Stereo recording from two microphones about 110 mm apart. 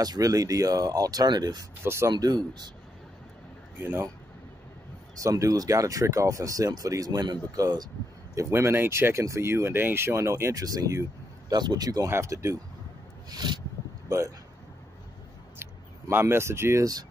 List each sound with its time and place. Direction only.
0.0 s speech: 35° right (ahead or behind)
1.9 s speech: 25° right (ahead or behind)
2.1 s speech: 40° right (ahead or behind)
3.8 s speech: 20° right (ahead or behind)
5.2 s speech: 30° right (ahead or behind)
8.4 s speech: 25° right (ahead or behind)
12.1 s speech: 25° right (ahead or behind)
13.3 s speech: 40° right (ahead or behind)
14.0 s speech: 30° right (ahead or behind)
15.6 s speech: 20° right (ahead or behind)